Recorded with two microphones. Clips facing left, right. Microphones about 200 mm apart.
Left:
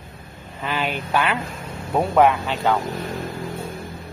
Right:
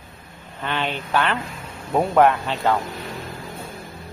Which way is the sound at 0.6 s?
5° left (ahead or behind).